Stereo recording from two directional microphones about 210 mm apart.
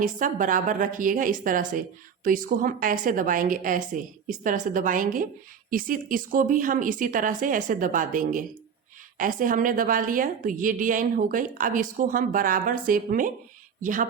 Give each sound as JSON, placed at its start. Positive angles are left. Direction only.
{"t": 0.0, "sound": "a woman's voice", "side_deg": -40}